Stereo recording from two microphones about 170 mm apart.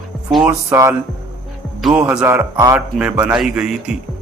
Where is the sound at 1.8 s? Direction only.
5° right (ahead or behind).